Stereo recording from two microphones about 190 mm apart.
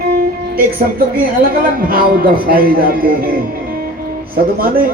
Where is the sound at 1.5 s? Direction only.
50° right (ahead or behind).